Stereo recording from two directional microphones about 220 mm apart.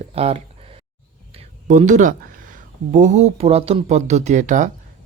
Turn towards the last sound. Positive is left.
turn(degrees=-35)  # may be behind; listen again after turning